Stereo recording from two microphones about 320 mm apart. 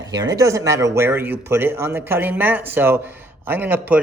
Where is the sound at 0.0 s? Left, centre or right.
Centre.